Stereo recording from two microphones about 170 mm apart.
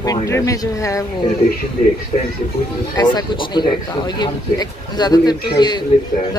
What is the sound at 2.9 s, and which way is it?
Speech, 25° left (ahead or behind).